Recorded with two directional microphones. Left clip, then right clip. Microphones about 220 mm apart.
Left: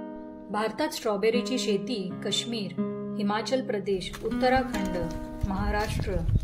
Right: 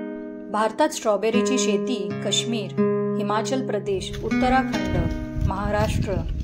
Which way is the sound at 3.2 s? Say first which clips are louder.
Right 4 dB; 10° right (ahead or behind).